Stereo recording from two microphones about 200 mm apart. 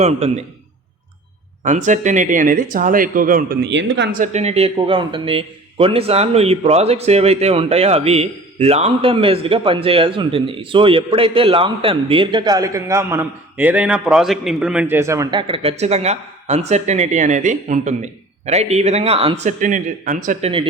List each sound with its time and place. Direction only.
0.0 s a man's voice: 35° right (ahead or behind)
1.6 s speech: 40° right (ahead or behind); by 4.1 s 60° right (ahead or behind)
4.1 s speech: 40° right (ahead or behind)